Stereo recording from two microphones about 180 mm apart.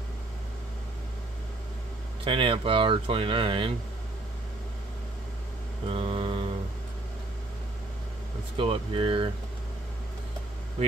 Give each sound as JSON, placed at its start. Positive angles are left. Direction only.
{"t": 2.2, "sound": "speech", "side_deg": -30}
{"t": 5.9, "sound": "mantra", "side_deg": -30}
{"t": 8.5, "sound": "speech", "side_deg": -30}